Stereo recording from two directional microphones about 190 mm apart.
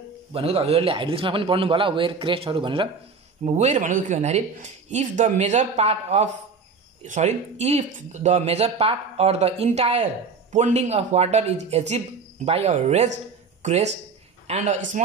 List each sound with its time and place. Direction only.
0.3 s a man's voice: 30° right (ahead or behind)
13.6 s a sound: 35° right (ahead or behind)
14.5 s speech: 35° right (ahead or behind)